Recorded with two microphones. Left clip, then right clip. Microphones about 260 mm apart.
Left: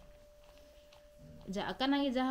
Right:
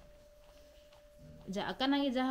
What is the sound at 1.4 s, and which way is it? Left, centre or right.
Speech, centre.